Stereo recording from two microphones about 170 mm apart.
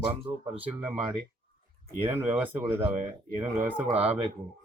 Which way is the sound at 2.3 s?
10° right (ahead or behind).